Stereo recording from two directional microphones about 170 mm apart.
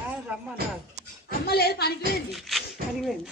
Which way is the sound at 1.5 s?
70° left (ahead or behind).